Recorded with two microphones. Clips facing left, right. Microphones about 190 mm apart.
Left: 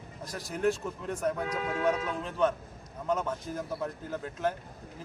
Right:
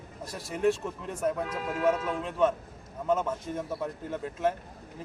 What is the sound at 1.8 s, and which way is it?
Speech, centre (ahead or behind).